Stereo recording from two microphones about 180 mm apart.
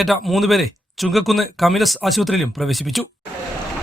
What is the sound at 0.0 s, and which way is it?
Speech, centre (ahead or behind).